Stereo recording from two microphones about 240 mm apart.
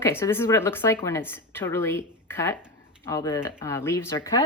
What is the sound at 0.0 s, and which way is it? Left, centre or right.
Speech, centre.